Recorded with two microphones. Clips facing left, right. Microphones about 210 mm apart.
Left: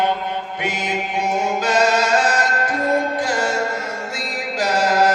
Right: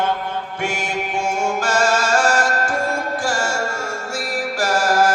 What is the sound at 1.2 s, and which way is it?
Chant, 20° left (ahead or behind).